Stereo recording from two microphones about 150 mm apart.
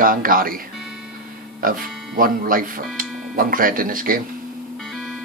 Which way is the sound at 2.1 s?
70° right (ahead or behind).